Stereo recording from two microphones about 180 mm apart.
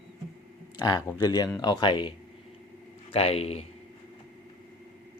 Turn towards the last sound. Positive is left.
turn(degrees=35)  # may be behind; listen again after turning